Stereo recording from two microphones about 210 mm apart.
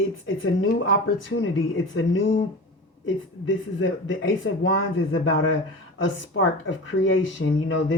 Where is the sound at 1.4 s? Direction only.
65° left (ahead or behind).